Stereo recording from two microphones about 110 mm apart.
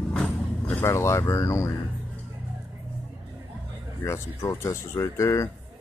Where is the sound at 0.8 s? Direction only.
25° left (ahead or behind).